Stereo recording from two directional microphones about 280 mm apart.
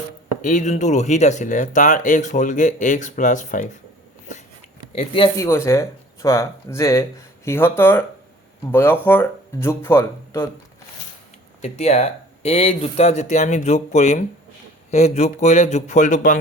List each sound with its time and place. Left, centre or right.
0.4 s speech: left
4.9 s speech: centre
11.6 s speech: left